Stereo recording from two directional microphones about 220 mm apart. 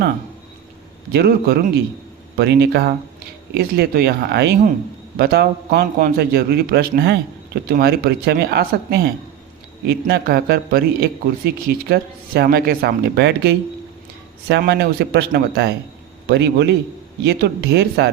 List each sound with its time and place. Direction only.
1.1 s a man's voice: 45° right (ahead or behind)